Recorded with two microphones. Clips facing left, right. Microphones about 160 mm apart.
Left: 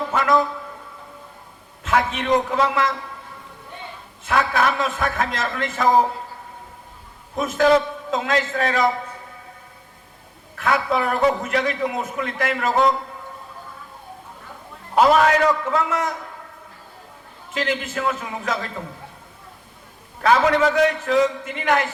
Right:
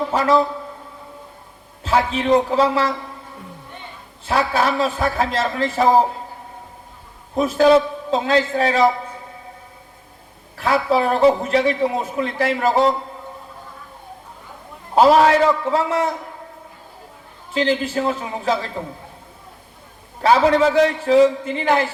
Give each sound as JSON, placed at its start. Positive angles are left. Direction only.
{"t": 0.1, "sound": "a man's voice", "side_deg": -30}
{"t": 1.8, "sound": "a man's voice", "side_deg": -30}
{"t": 4.3, "sound": "a man's voice", "side_deg": -30}
{"t": 7.3, "sound": "a man's voice", "side_deg": -30}
{"t": 10.5, "sound": "a man's voice", "side_deg": -30}
{"t": 14.9, "sound": "a man's voice", "side_deg": -30}
{"t": 17.5, "sound": "a man's voice", "side_deg": -30}
{"t": 20.2, "sound": "a man's voice", "side_deg": -30}